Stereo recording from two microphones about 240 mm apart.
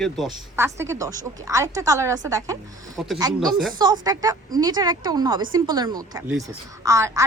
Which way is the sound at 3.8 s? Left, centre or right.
Centre.